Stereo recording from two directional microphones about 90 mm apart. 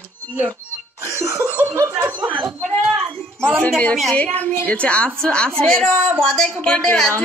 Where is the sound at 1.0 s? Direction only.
35° right (ahead or behind).